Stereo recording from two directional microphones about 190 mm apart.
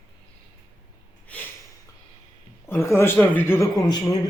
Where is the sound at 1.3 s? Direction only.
5° left (ahead or behind).